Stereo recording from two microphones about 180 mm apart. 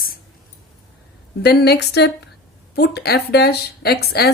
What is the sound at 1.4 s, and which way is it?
A woman's voice, 65° left (ahead or behind).